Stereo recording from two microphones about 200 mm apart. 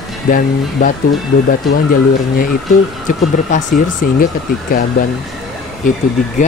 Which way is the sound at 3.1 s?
40° left (ahead or behind).